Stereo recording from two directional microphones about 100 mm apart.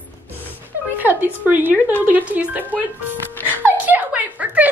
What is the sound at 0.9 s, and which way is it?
A woman's voice, 20° right (ahead or behind).